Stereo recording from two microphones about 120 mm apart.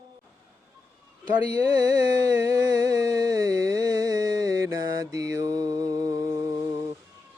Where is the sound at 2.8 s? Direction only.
25° right (ahead or behind).